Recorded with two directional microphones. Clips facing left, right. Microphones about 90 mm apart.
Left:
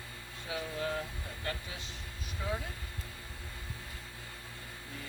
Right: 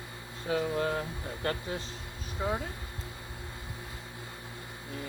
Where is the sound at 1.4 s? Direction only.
40° right (ahead or behind).